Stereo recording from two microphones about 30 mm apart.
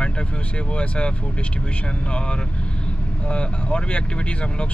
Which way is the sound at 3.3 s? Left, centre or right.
Left.